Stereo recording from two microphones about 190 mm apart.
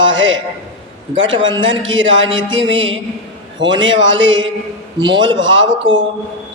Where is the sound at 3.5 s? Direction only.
75° right (ahead or behind).